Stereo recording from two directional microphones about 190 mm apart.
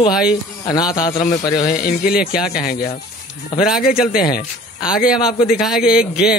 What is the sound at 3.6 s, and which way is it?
Speech, centre (ahead or behind).